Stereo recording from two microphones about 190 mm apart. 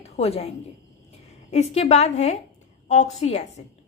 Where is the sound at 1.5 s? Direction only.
35° left (ahead or behind).